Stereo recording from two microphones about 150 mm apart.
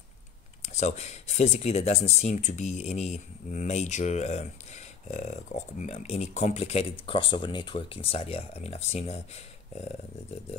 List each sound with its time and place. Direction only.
0.6 s speech: 50° left (ahead or behind)